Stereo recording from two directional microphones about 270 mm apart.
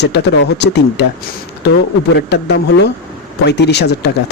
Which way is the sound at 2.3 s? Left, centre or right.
Left.